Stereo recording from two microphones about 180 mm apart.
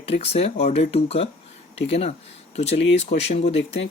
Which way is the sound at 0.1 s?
35° left (ahead or behind).